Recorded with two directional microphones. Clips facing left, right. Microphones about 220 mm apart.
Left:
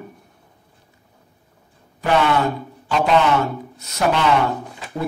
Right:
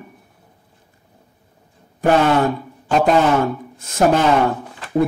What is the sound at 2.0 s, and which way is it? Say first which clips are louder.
Speech: right 3 dB; 45° right (ahead or behind).